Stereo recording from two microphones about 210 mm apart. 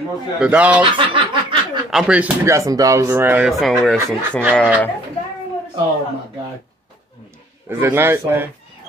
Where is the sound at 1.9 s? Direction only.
5° right (ahead or behind).